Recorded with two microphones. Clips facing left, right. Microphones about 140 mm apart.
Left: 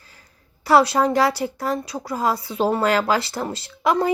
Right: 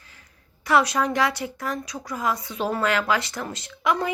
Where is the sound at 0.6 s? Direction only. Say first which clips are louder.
Left 5 dB; 30° left (ahead or behind).